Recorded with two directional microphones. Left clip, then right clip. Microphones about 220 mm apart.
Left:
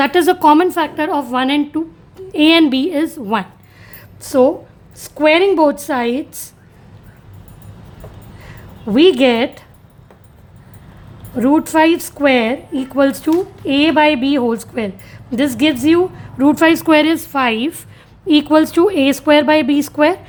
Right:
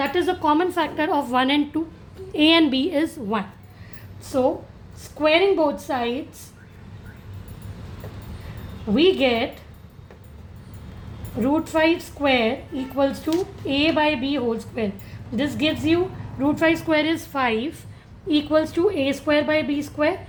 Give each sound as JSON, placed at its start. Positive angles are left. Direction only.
{"t": 0.0, "sound": "a woman's voice", "side_deg": 40}
{"t": 4.2, "sound": "a woman's voice", "side_deg": 45}
{"t": 8.9, "sound": "a woman's voice", "side_deg": 40}
{"t": 11.3, "sound": "a woman's voice", "side_deg": 40}